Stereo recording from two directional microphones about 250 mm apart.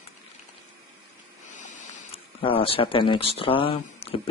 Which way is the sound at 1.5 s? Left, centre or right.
Left.